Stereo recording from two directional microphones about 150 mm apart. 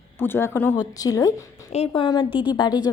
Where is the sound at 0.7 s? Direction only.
25° left (ahead or behind).